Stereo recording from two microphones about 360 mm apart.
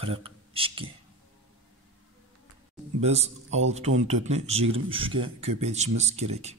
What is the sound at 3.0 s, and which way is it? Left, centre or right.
Speech, centre.